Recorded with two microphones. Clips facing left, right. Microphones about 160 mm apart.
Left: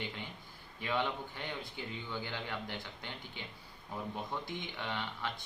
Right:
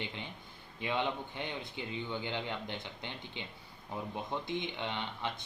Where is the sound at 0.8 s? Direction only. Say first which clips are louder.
Right 1 dB; 20° right (ahead or behind).